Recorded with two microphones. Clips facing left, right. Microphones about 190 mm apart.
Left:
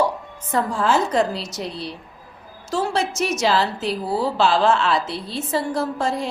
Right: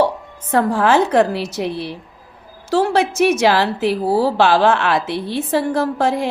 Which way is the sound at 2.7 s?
60° right (ahead or behind).